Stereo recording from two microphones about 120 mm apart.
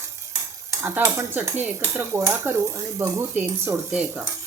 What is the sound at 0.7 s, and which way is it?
Dishes, 20° right (ahead or behind).